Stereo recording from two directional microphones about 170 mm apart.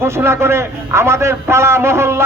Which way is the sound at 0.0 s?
15° right (ahead or behind).